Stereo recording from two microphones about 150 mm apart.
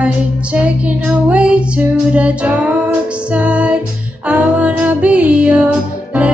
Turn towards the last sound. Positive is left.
turn(degrees=-10)  # may be behind; listen again after turning